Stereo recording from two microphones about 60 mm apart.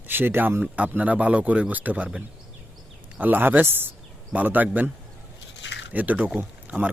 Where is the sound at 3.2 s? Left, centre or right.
Right.